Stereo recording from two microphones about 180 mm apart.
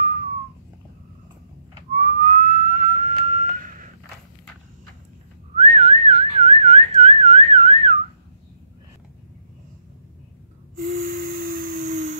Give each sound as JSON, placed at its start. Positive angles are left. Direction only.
{"t": 2.0, "sound": "whistling", "side_deg": -45}
{"t": 5.6, "sound": "whistling", "side_deg": -35}
{"t": 10.8, "sound": "a sound", "side_deg": -50}